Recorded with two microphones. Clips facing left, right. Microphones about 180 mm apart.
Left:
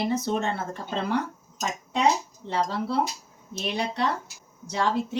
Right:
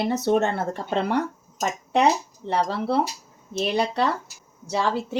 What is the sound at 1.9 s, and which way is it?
Speech, 70° right (ahead or behind).